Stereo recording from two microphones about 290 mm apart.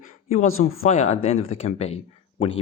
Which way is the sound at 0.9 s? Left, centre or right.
Left.